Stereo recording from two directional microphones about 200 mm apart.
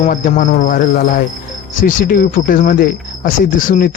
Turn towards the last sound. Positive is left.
turn(degrees=40)  # may be behind; listen again after turning